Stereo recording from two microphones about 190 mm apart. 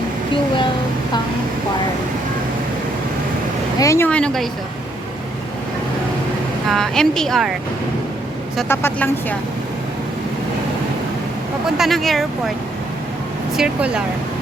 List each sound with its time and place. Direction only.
3.8 s speech: 15° left (ahead or behind)
6.7 s speech: centre (ahead or behind)
8.6 s speech: 10° left (ahead or behind)
11.8 s speech: centre (ahead or behind)
13.6 s speech: 5° right (ahead or behind)